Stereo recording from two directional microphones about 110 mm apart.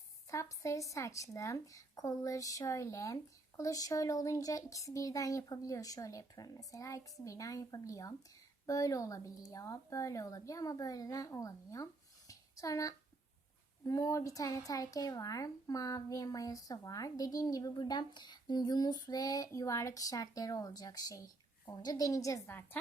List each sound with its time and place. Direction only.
0.3 s a woman's voice: 30° left (ahead or behind)
12.3 s a sound: 30° left (ahead or behind)
13.8 s a woman's voice: 30° left (ahead or behind)